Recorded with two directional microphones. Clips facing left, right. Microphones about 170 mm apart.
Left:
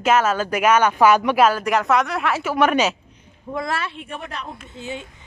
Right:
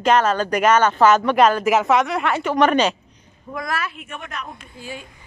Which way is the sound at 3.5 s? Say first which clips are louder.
Left 1 dB; 25° left (ahead or behind).